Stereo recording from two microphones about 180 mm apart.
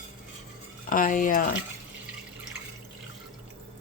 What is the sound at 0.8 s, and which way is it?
Speech, 50° left (ahead or behind).